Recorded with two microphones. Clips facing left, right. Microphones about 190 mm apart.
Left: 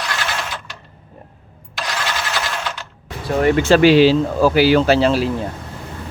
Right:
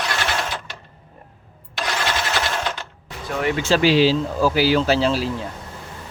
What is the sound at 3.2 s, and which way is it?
Speech, 35° left (ahead or behind).